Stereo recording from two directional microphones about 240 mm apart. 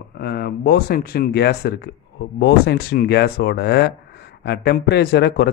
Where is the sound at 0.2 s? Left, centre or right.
Left.